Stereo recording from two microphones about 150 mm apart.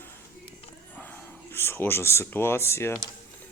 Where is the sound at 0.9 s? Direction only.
15° left (ahead or behind).